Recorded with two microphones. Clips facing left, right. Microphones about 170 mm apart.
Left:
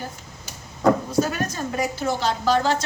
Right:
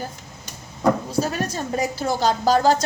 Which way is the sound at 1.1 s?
35° right (ahead or behind).